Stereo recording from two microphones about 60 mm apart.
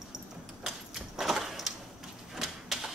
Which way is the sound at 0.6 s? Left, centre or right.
Centre.